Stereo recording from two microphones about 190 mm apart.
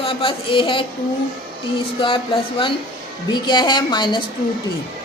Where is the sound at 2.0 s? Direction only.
25° left (ahead or behind).